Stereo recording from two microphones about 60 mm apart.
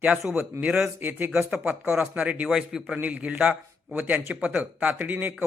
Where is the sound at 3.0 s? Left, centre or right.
Right.